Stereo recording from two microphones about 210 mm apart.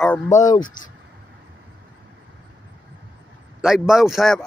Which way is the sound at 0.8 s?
40° left (ahead or behind).